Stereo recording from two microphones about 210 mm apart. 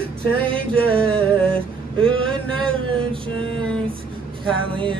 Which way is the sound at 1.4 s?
5° left (ahead or behind).